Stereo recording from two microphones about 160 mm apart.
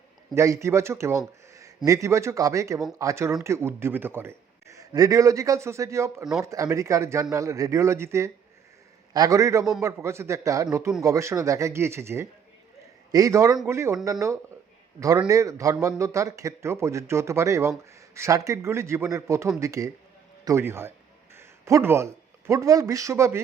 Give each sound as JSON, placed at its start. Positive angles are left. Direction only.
{"t": 0.3, "sound": "a man's voice", "side_deg": -20}